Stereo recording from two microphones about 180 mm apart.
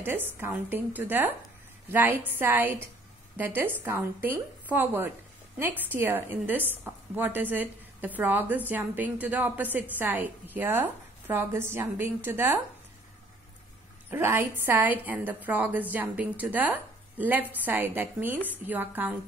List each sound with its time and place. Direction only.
0.0 s a woman's voice: 10° right (ahead or behind)
14.1 s a woman's voice: 15° right (ahead or behind)